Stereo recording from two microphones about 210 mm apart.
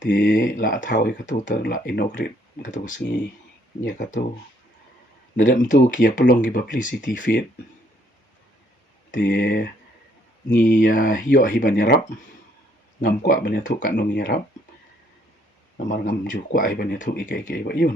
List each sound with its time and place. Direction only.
0.1 s speech: 40° left (ahead or behind)
5.4 s speech: 35° left (ahead or behind)
9.2 s speech: 55° left (ahead or behind)
10.7 s speech: 55° left (ahead or behind)
10.9 s speech: 40° left (ahead or behind)
13.0 s speech: 45° left (ahead or behind)
15.9 s speech: 40° left (ahead or behind)